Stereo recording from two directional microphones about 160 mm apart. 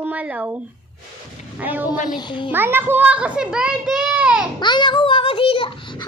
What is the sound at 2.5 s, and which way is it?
A child's voice, 15° right (ahead or behind).